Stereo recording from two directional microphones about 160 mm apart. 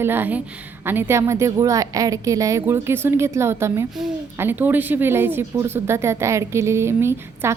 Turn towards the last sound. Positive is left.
turn(degrees=-15)  # may be behind; listen again after turning